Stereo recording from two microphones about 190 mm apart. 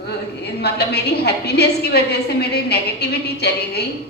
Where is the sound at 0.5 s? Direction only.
60° left (ahead or behind).